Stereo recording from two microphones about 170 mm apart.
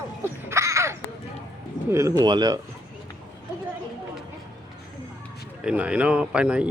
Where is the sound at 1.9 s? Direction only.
15° right (ahead or behind).